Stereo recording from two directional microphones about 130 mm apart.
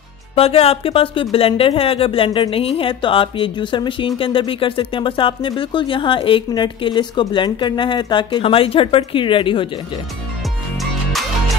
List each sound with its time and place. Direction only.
0.4 s speech: 50° left (ahead or behind)
10.8 s music: centre (ahead or behind)